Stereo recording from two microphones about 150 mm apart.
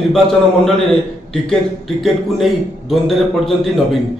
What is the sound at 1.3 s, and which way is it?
A man's voice, centre (ahead or behind).